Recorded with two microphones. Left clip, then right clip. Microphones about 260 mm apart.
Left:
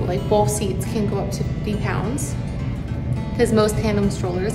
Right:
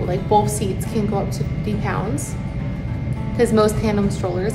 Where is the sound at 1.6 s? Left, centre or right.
Centre.